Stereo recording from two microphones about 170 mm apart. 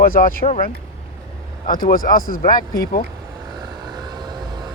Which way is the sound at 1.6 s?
55° left (ahead or behind).